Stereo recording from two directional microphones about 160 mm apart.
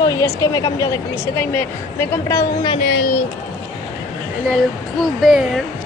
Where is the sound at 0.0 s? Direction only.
20° left (ahead or behind).